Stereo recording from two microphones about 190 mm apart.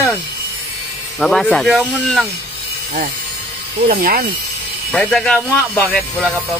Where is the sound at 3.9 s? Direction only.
50° right (ahead or behind).